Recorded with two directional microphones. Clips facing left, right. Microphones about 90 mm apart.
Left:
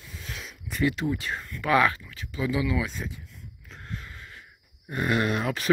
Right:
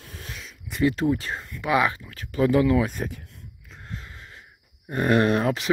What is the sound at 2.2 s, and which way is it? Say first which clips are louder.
Speech: right 8 dB; 55° right (ahead or behind).